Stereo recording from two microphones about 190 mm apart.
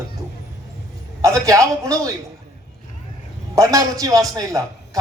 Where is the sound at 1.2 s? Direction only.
15° right (ahead or behind).